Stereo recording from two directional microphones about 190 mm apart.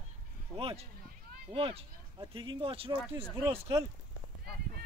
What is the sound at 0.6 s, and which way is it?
Speech, 30° right (ahead or behind).